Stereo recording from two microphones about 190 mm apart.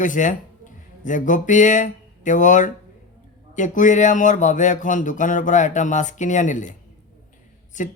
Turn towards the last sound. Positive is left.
turn(degrees=40)  # may be behind; listen again after turning